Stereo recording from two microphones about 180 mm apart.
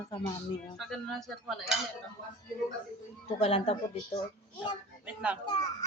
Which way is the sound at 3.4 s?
30° left (ahead or behind).